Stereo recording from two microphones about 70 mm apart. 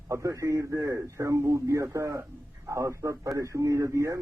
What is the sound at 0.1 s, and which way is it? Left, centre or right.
A man's voice, right.